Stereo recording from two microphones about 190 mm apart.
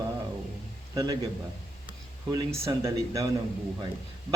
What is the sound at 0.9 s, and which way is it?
Speech, 20° right (ahead or behind).